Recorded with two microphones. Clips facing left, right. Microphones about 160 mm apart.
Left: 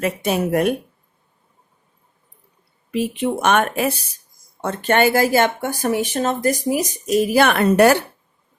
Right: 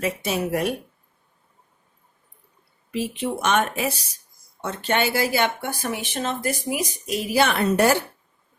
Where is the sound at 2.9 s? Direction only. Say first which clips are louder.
Left 5 dB; 55° left (ahead or behind).